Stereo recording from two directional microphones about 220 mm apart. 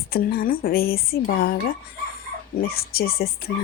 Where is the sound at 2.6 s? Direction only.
45° left (ahead or behind).